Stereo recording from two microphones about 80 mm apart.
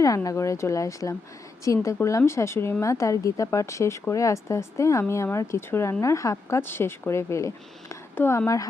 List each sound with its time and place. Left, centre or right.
0.3 s speech: left
8.1 s speech: left